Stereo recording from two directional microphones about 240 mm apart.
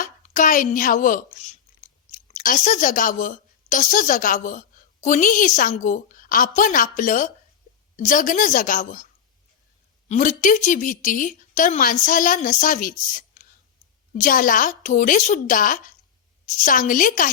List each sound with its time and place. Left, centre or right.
0.0 s a sound: left
5.0 s a woman's voice: left
10.1 s a woman's voice: left